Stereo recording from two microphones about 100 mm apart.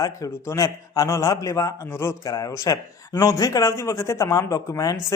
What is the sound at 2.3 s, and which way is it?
Speech, 35° left (ahead or behind).